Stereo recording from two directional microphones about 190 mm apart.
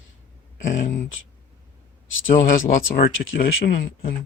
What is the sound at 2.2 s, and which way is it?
Speech, 45° left (ahead or behind).